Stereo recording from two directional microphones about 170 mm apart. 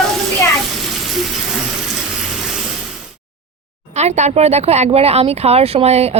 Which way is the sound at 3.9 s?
40° right (ahead or behind).